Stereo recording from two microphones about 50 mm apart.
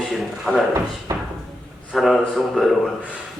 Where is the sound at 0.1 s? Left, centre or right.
Centre.